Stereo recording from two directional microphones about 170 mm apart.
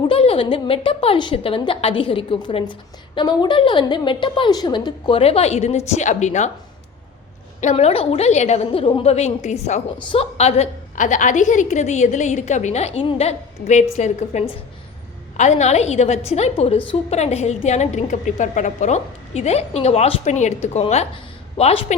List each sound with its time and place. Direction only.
0.1 s a woman's voice: 35° left (ahead or behind)
7.6 s a woman's voice: 40° left (ahead or behind)
10.0 s a woman's voice: 30° left (ahead or behind)